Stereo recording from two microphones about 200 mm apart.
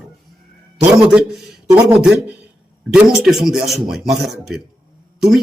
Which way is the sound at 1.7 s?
5° right (ahead or behind).